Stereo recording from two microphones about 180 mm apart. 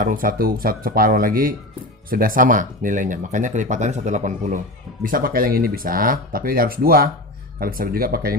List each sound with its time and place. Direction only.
0.0 s speech: 50° right (ahead or behind)